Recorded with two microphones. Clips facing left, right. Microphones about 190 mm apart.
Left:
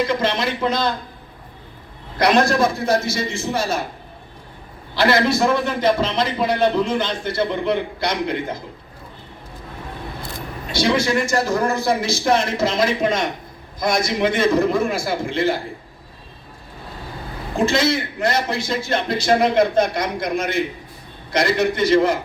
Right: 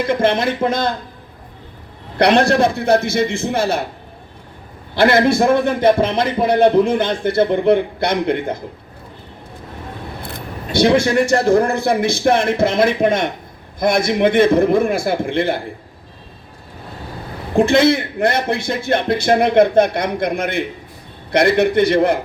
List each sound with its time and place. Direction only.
0.0 s a man's voice: 55° right (ahead or behind)
2.1 s a man's voice: 65° right (ahead or behind)
4.9 s a man's voice: 55° right (ahead or behind)
10.2 s a man's voice: 55° right (ahead or behind)
17.6 s a man's voice: 55° right (ahead or behind)